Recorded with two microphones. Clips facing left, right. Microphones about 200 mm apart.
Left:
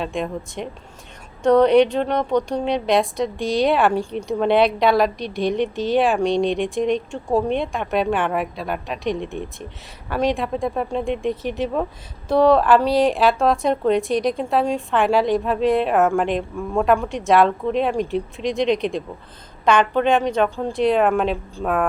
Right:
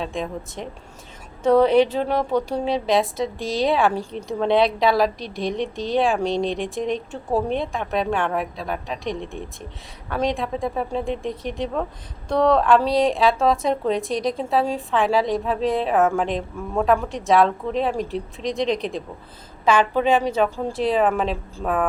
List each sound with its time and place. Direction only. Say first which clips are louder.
0.0 s a woman's voice: left 2 dB; centre (ahead or behind)